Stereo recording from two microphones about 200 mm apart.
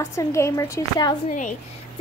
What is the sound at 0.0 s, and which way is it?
A child's voice, 15° left (ahead or behind).